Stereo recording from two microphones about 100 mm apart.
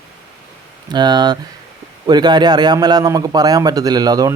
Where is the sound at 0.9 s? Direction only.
45° right (ahead or behind).